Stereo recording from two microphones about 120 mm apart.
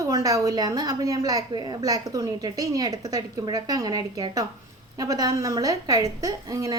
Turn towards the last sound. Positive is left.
turn(degrees=-30)  # may be behind; listen again after turning